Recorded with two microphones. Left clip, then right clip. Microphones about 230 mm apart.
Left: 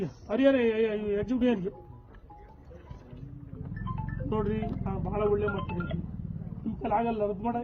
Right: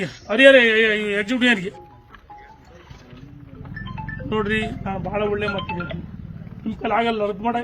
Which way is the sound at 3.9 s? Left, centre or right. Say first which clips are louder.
Right 8 dB; right.